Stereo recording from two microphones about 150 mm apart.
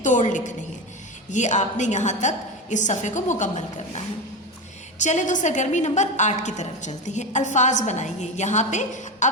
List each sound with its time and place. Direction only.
0.0 s a woman's voice: 55° left (ahead or behind)
9.2 s music: 55° left (ahead or behind)